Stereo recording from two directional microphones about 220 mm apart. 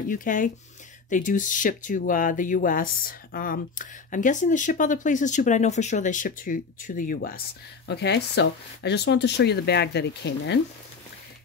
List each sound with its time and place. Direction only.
0.1 s speech: 35° left (ahead or behind)